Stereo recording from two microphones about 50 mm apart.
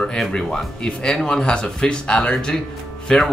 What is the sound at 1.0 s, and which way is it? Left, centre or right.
Speech, centre.